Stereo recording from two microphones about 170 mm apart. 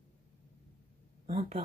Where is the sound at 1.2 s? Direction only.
35° right (ahead or behind).